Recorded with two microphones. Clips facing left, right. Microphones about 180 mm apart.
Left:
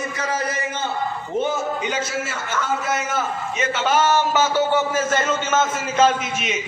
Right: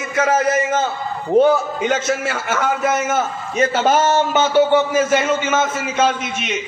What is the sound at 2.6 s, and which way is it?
Speech, 20° right (ahead or behind).